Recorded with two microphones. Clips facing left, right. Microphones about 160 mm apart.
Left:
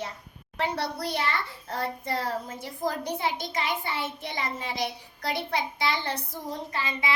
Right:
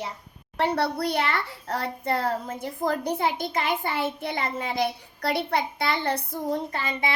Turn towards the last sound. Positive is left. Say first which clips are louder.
# right 2 dB
turn(degrees=-55)  # may be behind; listen again after turning